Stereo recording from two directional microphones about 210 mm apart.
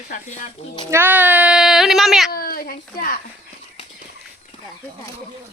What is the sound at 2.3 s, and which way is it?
Speech, 45° left (ahead or behind).